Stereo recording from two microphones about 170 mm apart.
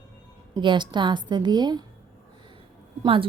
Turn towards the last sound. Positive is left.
turn(degrees=-30)  # may be behind; listen again after turning